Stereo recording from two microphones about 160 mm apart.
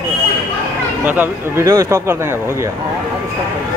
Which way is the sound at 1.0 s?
10° right (ahead or behind).